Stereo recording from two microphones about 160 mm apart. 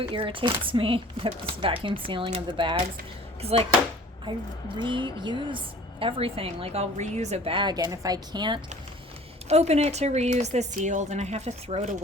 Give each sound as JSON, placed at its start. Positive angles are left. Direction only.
{"t": 0.0, "sound": "a woman's voice", "side_deg": -30}
{"t": 9.5, "sound": "a woman's voice", "side_deg": -40}